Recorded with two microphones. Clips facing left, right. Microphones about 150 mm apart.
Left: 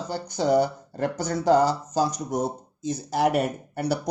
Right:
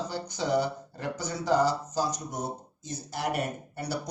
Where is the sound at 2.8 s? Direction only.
85° left; by 4.0 s 65° left (ahead or behind).